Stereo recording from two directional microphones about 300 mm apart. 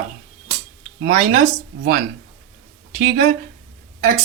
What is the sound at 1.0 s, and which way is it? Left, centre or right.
Speech, right.